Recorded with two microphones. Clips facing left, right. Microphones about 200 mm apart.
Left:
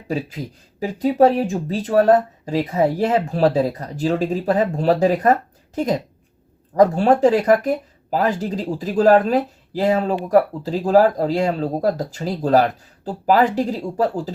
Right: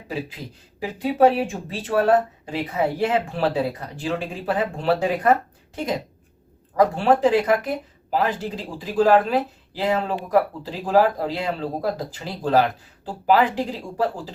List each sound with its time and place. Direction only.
0.8 s speech: 40° left (ahead or behind)